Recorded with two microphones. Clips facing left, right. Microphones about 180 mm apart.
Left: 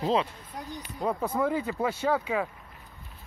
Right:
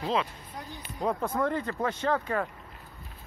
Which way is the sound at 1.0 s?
5° left (ahead or behind).